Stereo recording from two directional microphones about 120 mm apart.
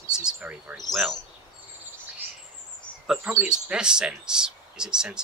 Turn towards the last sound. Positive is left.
turn(degrees=-5)  # may be behind; listen again after turning